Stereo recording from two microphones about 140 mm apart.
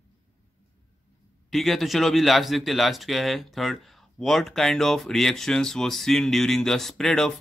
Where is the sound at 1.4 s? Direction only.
Centre (ahead or behind).